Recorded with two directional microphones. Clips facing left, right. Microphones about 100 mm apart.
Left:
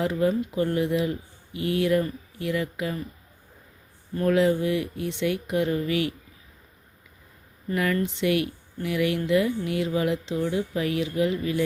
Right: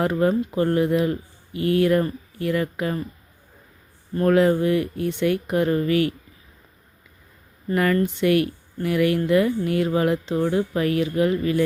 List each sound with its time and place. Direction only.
0.0 s speech: 50° right (ahead or behind)
4.1 s speech: 45° right (ahead or behind)
7.7 s speech: 45° right (ahead or behind)